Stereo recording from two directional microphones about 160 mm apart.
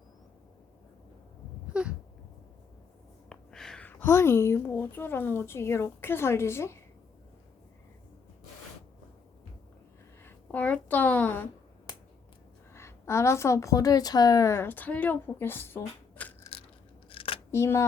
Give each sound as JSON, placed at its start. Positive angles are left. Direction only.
{"t": 1.7, "sound": "a sound", "side_deg": -5}
{"t": 3.2, "sound": "a woman's voice", "side_deg": 5}
{"t": 10.2, "sound": "a sound", "side_deg": 10}
{"t": 11.9, "sound": "finger snapping", "side_deg": 25}
{"t": 12.7, "sound": "a woman's voice", "side_deg": 15}
{"t": 17.1, "sound": "scissors", "side_deg": 35}
{"t": 17.5, "sound": "speech", "side_deg": 15}